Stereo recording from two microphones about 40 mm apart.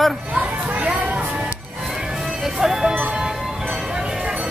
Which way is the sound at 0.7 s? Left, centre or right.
Right.